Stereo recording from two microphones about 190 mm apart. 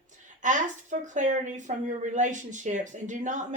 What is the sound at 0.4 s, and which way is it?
Speech, 40° right (ahead or behind).